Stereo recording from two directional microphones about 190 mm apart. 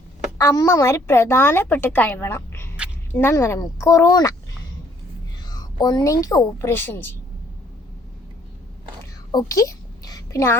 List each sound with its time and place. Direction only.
0.3 s a woman's voice: 15° left (ahead or behind)
5.5 s speech: 20° left (ahead or behind)
9.4 s a sound: 15° left (ahead or behind)